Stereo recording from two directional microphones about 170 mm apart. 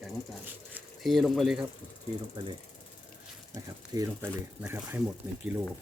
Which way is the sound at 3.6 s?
20° right (ahead or behind).